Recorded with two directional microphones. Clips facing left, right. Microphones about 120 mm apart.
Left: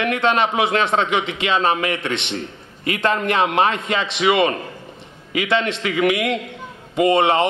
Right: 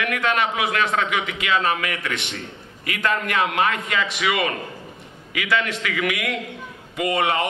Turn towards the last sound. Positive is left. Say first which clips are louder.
# left 6 dB
turn(degrees=25)  # may be behind; listen again after turning